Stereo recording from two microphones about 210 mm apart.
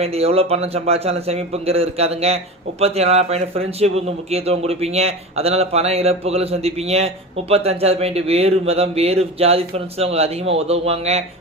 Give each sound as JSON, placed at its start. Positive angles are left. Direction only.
{"t": 0.0, "sound": "a man's voice", "side_deg": -30}